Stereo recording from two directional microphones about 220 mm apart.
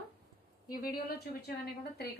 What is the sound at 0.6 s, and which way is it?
Speech, 40° left (ahead or behind).